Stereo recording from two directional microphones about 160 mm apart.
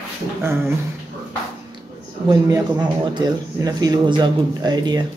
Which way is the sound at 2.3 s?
25° right (ahead or behind).